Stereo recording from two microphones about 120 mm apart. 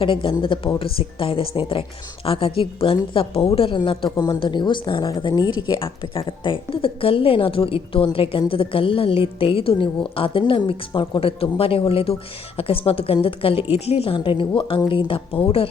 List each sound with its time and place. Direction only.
0.0 s a woman's voice: 45° left (ahead or behind)